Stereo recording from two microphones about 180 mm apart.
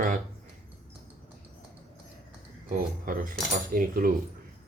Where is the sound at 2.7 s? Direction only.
50° right (ahead or behind).